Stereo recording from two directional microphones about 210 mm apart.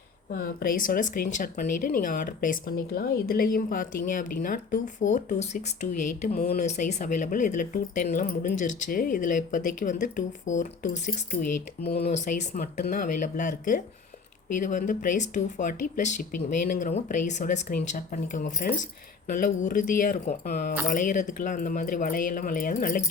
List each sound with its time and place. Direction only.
0.3 s speech: 45° left (ahead or behind)
12.0 s speech: 35° left (ahead or behind)